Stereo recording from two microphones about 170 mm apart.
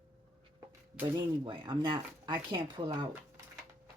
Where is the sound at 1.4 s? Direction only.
30° right (ahead or behind).